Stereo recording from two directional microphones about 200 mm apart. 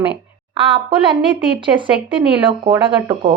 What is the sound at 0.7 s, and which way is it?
A woman's voice, 25° right (ahead or behind).